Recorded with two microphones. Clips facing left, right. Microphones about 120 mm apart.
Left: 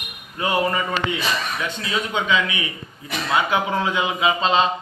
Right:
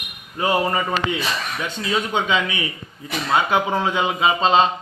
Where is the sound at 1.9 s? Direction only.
30° right (ahead or behind).